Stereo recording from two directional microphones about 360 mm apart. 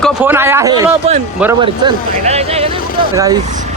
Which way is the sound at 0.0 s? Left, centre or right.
Centre.